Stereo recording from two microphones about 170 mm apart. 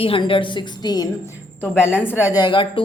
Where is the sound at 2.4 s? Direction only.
25° left (ahead or behind).